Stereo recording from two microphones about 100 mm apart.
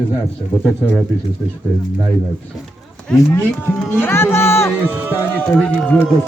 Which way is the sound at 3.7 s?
Centre (ahead or behind).